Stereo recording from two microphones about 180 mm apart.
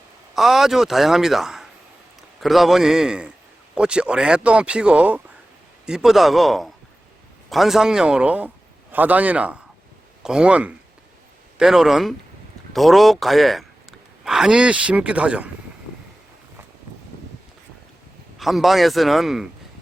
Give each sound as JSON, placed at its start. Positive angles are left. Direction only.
{"t": 0.3, "sound": "a man's voice", "side_deg": 0}
{"t": 18.3, "sound": "speech", "side_deg": 0}